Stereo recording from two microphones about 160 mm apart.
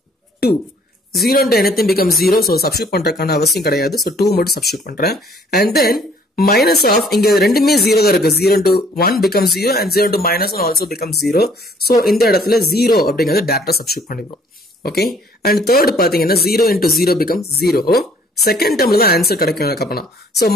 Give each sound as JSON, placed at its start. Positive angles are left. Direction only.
{"t": 0.4, "sound": "speech", "side_deg": 75}
{"t": 1.8, "sound": "speech", "side_deg": 70}
{"t": 2.0, "sound": "speech", "side_deg": 0}
{"t": 2.3, "sound": "speech", "side_deg": 75}